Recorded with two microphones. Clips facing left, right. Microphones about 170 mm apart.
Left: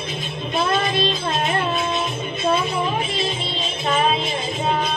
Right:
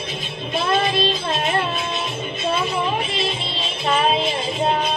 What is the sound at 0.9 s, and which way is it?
Music, 50° left (ahead or behind).